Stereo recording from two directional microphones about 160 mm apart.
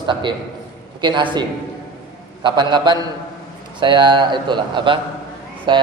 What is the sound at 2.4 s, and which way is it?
A man's voice, 30° right (ahead or behind).